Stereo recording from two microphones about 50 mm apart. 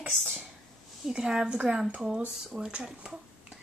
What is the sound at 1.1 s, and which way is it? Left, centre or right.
Speech, centre.